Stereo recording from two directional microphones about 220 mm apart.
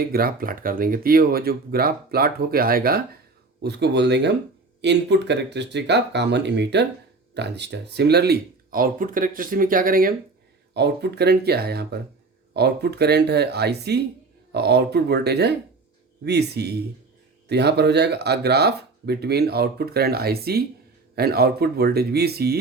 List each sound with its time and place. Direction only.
0.1 s speech: 40° right (ahead or behind)